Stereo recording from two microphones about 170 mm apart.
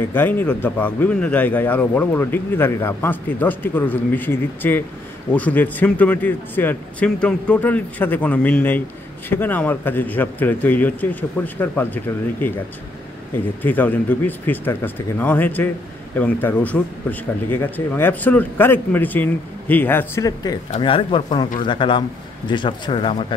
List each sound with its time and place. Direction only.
0.1 s speech: 10° left (ahead or behind)
13.6 s speech: 10° left (ahead or behind)
20.7 s speech: 30° left (ahead or behind)